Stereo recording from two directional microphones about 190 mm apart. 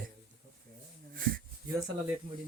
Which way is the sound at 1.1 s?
50° right (ahead or behind).